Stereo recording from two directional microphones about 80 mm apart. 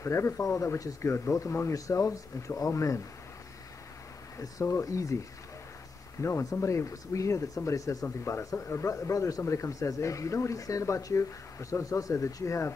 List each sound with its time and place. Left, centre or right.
0.0 s speech: left
4.4 s speech: left